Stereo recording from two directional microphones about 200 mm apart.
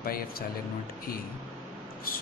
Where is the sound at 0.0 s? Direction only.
50° left (ahead or behind).